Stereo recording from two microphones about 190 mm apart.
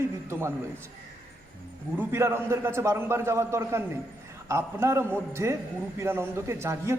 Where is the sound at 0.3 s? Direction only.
15° right (ahead or behind).